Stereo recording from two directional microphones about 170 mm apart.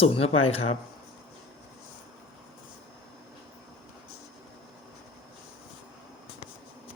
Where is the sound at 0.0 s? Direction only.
35° left (ahead or behind).